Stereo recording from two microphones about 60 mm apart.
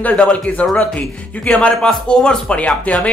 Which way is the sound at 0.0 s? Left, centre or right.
Left.